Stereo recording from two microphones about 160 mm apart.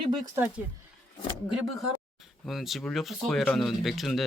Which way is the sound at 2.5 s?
Centre (ahead or behind).